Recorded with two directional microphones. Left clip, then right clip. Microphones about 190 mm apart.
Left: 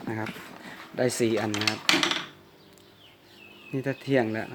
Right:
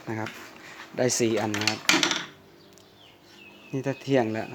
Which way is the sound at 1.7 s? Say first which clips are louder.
Right 1 dB; 10° right (ahead or behind).